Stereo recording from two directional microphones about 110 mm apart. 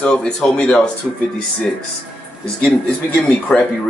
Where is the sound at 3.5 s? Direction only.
20° left (ahead or behind).